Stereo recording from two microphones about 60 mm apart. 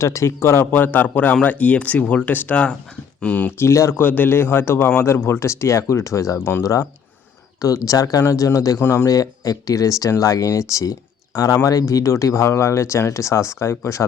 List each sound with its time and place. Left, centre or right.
0.0 s speech: left
0.7 s speech: left
3.6 s speech: left
3.9 s speech: left
7.9 s speech: left
8.3 s speech: left
9.0 s speech: left
11.3 s speech: left